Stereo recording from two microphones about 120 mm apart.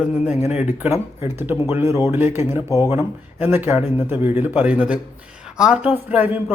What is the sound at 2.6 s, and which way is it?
Speech, 30° left (ahead or behind).